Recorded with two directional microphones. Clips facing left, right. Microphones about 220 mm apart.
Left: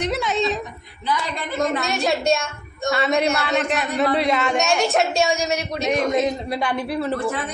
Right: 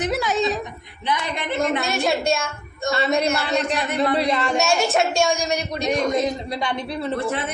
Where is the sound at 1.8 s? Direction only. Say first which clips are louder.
Even; centre (ahead or behind).